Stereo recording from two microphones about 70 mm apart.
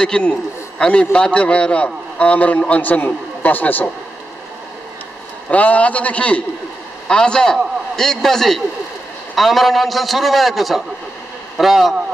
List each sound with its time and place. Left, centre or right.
0.0 s a man's voice: centre
5.5 s a man's voice: centre